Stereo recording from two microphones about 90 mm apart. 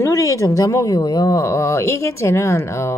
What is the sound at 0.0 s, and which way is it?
A woman's voice, 35° left (ahead or behind).